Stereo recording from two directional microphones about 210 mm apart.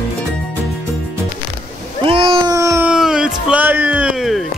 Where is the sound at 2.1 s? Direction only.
25° right (ahead or behind).